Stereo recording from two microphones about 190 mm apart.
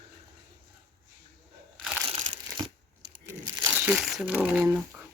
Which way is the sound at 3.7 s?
5° right (ahead or behind).